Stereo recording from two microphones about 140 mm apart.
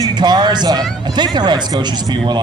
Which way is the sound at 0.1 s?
30° right (ahead or behind).